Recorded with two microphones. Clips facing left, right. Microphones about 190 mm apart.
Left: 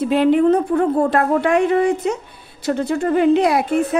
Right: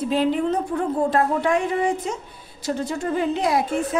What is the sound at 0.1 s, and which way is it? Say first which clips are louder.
Speech: left 8 dB; 65° left (ahead or behind).